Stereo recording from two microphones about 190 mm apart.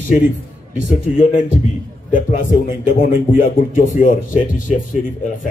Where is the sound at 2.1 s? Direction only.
45° left (ahead or behind).